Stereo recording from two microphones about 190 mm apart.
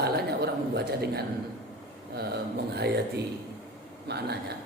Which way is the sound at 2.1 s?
60° right (ahead or behind).